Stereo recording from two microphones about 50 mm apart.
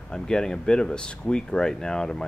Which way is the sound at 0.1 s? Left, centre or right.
Centre.